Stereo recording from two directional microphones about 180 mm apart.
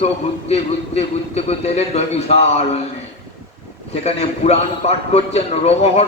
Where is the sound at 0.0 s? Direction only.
35° left (ahead or behind).